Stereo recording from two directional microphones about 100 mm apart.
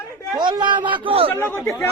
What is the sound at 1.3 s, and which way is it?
Speech, 25° left (ahead or behind).